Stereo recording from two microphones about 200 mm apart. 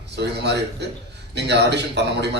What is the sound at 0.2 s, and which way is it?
A man's voice, 60° right (ahead or behind).